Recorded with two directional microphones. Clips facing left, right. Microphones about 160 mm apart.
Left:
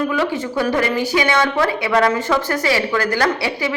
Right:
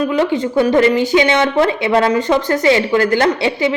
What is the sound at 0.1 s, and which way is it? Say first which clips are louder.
A woman's voice: right 5 dB; 20° right (ahead or behind).